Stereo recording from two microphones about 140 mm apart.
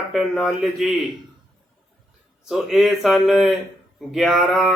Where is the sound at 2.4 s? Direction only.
5° right (ahead or behind).